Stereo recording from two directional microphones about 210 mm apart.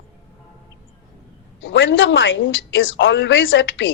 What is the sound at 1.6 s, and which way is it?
A woman's voice, 65° left (ahead or behind).